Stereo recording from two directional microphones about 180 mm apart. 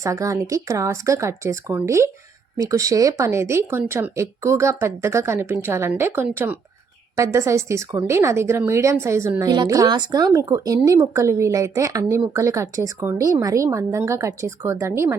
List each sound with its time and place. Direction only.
0.0 s a woman's voice: 15° right (ahead or behind)